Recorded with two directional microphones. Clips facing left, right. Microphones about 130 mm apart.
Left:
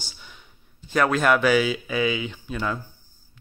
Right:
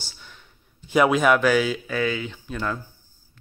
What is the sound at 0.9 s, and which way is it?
Speech, 10° right (ahead or behind).